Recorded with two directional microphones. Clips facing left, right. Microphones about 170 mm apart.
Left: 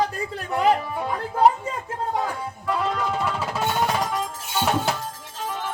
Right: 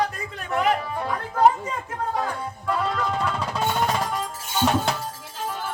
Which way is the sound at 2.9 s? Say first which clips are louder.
Even; 5° left (ahead or behind).